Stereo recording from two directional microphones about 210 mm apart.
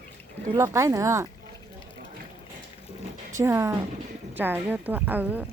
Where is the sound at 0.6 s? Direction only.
15° right (ahead or behind).